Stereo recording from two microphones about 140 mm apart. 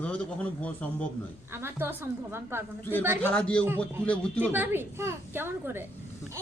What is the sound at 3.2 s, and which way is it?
Speech, 10° left (ahead or behind).